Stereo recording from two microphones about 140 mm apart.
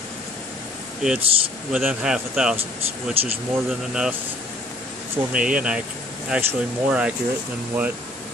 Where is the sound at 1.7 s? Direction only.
5° right (ahead or behind).